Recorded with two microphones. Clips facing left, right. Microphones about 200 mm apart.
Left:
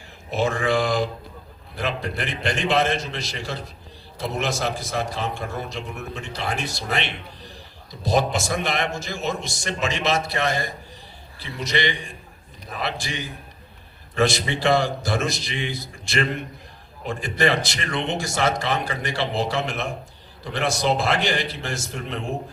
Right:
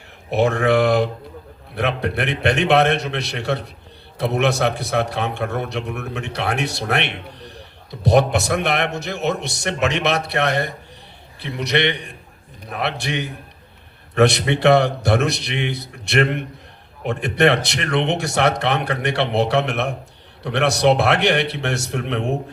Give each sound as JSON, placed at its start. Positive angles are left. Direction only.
{"t": 0.3, "sound": "a man's voice", "side_deg": -65}